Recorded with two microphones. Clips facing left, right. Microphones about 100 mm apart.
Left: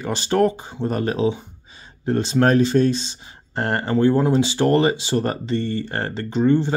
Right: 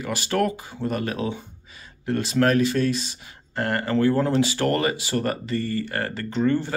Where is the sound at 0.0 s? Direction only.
30° left (ahead or behind).